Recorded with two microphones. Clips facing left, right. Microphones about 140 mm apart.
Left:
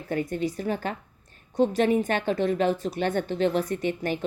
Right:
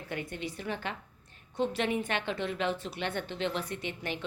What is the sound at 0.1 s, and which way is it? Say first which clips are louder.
A woman's voice: left 10 dB; 40° left (ahead or behind).